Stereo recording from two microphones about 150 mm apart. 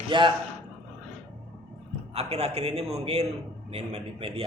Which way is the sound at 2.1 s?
45° right (ahead or behind).